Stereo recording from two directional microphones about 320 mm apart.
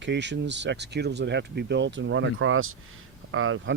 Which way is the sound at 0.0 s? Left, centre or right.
Right.